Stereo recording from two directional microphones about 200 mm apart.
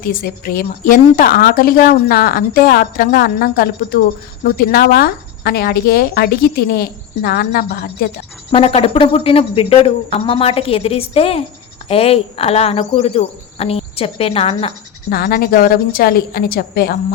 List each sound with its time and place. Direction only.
0.0 s speech: 45° left (ahead or behind)
8.5 s speech: 30° left (ahead or behind)
15.1 s speech: 50° left (ahead or behind)